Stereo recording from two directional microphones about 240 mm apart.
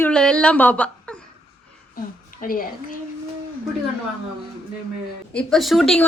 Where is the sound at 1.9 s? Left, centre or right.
Left.